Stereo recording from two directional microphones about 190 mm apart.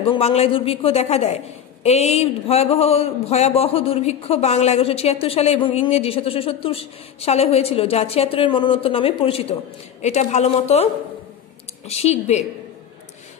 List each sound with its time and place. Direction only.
0.1 s a woman's voice: 30° left (ahead or behind)